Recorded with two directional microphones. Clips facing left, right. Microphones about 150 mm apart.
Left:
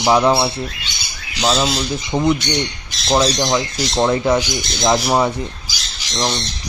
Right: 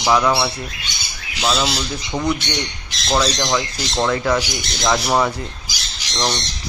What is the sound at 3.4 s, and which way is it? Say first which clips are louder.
Speech: left 3 dB; 15° left (ahead or behind).